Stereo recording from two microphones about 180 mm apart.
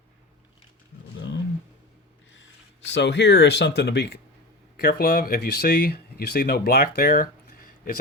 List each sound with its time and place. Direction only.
2.9 s speech: 75° left (ahead or behind)
4.8 s speech: 55° left (ahead or behind)